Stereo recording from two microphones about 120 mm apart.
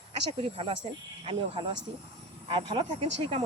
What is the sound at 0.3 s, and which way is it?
Speech, 60° right (ahead or behind).